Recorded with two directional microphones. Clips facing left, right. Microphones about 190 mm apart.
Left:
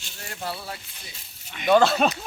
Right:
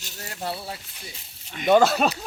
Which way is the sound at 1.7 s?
5° right (ahead or behind).